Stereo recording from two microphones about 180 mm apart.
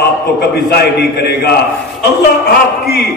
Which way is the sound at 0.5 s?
65° left (ahead or behind).